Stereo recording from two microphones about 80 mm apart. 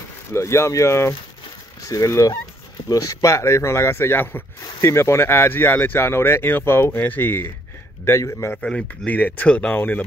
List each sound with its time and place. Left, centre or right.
0.3 s speech: left
8.0 s speech: left
8.5 s speech: centre